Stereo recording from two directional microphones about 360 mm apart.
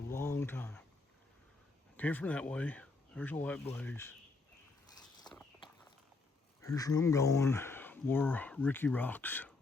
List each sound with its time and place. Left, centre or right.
0.1 s a sound: centre
2.0 s speech: centre
5.3 s walk: centre
6.6 s speech: centre